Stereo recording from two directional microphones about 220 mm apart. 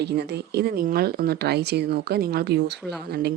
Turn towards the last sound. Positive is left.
turn(degrees=-45)  # may be behind; listen again after turning